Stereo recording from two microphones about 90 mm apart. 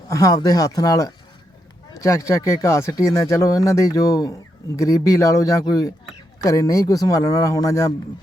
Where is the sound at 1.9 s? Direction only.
35° left (ahead or behind).